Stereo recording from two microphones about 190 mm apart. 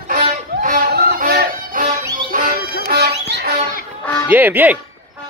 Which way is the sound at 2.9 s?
60° right (ahead or behind).